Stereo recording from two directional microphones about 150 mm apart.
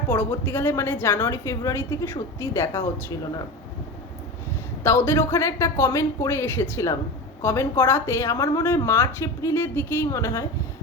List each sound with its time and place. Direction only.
0.1 s a woman's voice: 15° left (ahead or behind)
4.8 s a woman's voice: 15° left (ahead or behind)